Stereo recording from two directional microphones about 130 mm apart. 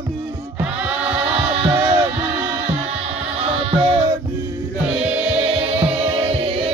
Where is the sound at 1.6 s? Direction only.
45° right (ahead or behind).